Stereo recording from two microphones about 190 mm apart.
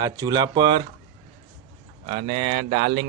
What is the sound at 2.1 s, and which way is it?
Speech, 25° right (ahead or behind).